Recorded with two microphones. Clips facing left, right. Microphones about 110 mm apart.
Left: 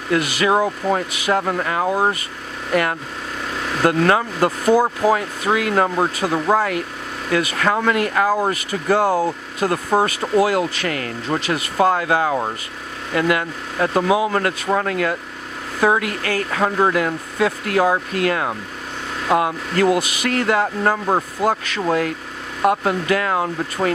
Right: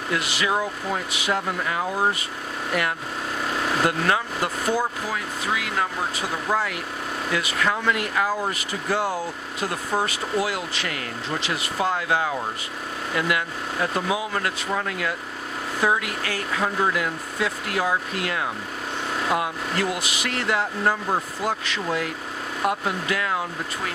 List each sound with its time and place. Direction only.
0.1 s speech: 50° left (ahead or behind)
1.4 s speech: 60° left (ahead or behind)
2.7 s speech: 50° left (ahead or behind)
13.9 s speech: 60° left (ahead or behind)